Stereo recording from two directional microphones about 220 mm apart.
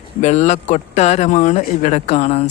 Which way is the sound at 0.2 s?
30° left (ahead or behind).